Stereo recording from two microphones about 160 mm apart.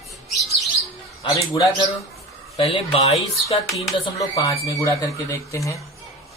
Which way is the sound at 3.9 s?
20° left (ahead or behind).